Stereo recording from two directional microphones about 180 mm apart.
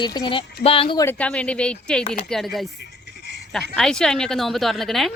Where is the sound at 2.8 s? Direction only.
65° left (ahead or behind).